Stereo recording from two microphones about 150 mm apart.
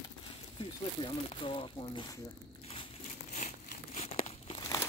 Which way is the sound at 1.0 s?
35° left (ahead or behind).